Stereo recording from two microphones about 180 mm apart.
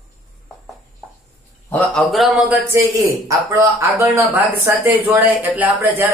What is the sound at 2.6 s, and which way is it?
Speech, 15° right (ahead or behind).